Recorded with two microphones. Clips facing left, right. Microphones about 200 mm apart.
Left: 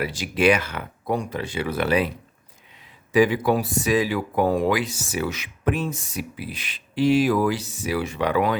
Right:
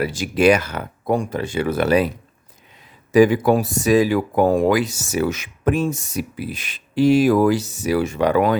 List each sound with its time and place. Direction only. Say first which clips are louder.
0.0 s speech: right 4 dB; 45° right (ahead or behind)
3.1 s speech: right 5 dB; 45° right (ahead or behind)